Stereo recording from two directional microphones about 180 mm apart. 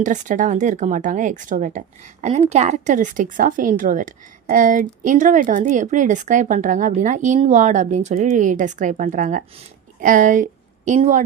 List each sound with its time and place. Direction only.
0.0 s a woman's voice: 45° right (ahead or behind)
2.2 s a woman's voice: 35° right (ahead or behind)